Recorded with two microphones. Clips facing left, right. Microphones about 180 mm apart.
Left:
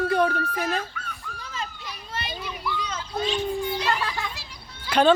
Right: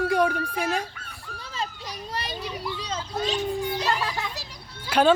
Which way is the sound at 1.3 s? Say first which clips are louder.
Right 4 dB; 30° right (ahead or behind).